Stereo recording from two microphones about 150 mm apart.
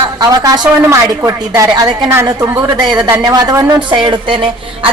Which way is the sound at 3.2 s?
25° right (ahead or behind).